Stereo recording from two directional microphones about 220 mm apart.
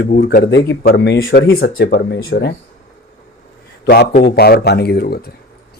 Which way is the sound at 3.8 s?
50° left (ahead or behind).